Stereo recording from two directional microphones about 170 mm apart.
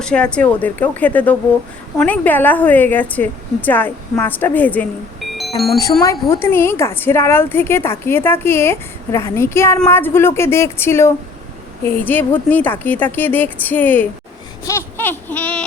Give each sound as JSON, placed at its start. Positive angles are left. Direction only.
{"t": 0.0, "sound": "a woman's voice", "side_deg": 5}
{"t": 6.0, "sound": "a woman's voice", "side_deg": 15}
{"t": 14.6, "sound": "a sound", "side_deg": 15}